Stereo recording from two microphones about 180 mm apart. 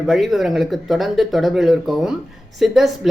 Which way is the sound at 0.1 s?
Centre (ahead or behind).